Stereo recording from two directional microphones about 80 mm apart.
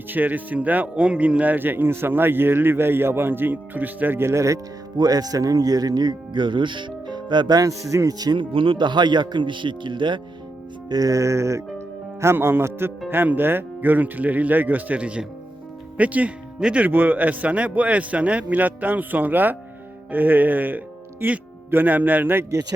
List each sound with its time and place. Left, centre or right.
0.1 s speech: right
4.9 s speech: right
7.6 s speech: right
8.3 s speech: right
10.8 s music: right
13.1 s speech: right